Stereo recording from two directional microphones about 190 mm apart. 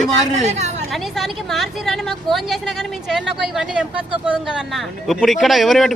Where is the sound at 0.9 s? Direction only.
Centre (ahead or behind).